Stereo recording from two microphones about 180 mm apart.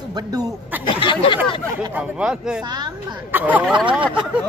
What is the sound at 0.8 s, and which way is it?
Speech, 30° left (ahead or behind).